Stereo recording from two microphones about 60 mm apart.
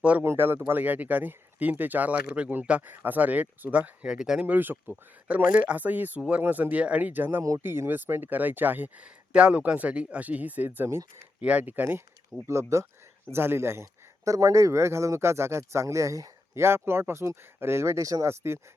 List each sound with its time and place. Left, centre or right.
0.3 s speech: right
0.8 s speech: right
2.9 s speech: right; by 4.4 s centre
4.4 s speech: right
12.5 s speech: right
14.3 s speech: right
16.6 s speech: right
18.3 s speech: right